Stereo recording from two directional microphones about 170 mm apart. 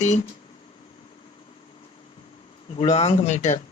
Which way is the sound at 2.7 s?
30° left (ahead or behind).